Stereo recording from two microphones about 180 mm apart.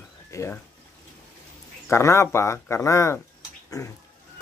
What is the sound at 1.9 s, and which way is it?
Speech, 15° left (ahead or behind).